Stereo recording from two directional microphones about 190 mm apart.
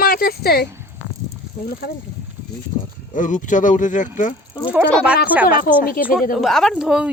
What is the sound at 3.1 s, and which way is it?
Speech, 40° left (ahead or behind).